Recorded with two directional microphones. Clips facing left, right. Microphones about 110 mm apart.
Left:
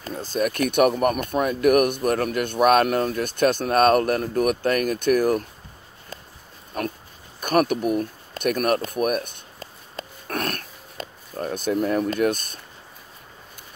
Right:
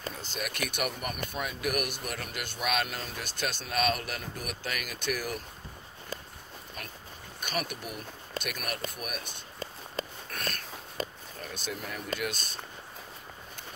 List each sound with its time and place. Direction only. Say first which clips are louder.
0.1 s speech: left 13 dB; 40° left (ahead or behind)
6.8 s speech: left 18 dB; 50° left (ahead or behind)
10.2 s a sound: left 10 dB; 60° left (ahead or behind)
11.3 s speech: left 15 dB; 50° left (ahead or behind)